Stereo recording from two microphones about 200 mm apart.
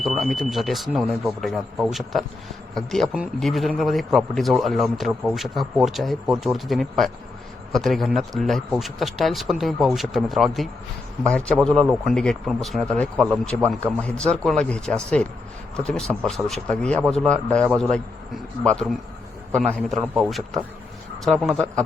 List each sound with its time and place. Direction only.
0.0 s a man's voice: centre (ahead or behind)